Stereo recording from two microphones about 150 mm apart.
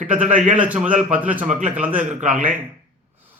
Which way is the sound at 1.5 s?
55° right (ahead or behind).